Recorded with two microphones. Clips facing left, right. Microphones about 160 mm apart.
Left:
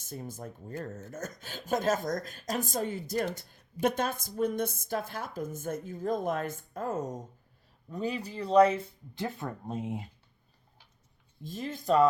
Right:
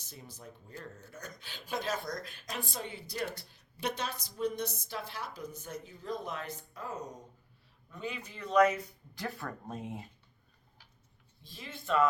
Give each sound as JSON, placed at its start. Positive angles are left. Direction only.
{"t": 0.0, "sound": "speech", "side_deg": 50}
{"t": 7.9, "sound": "speech", "side_deg": 35}
{"t": 11.4, "sound": "speech", "side_deg": 45}